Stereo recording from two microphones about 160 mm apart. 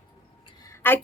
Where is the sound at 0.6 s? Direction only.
15° left (ahead or behind).